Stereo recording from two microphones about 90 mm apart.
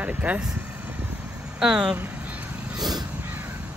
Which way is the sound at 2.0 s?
15° right (ahead or behind).